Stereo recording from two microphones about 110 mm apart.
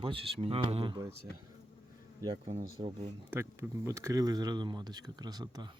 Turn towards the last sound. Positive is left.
turn(degrees=-40)  # may be behind; listen again after turning